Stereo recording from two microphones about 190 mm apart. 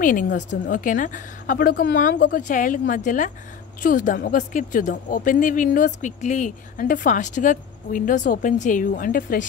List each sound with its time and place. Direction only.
0.0 s speech: 45° left (ahead or behind)